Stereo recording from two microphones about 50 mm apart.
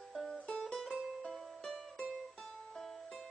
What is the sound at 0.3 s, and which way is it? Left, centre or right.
Music, centre.